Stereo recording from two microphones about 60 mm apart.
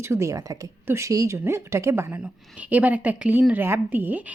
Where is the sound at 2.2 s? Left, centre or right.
Right.